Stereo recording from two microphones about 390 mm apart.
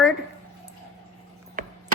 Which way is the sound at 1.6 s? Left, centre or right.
Right.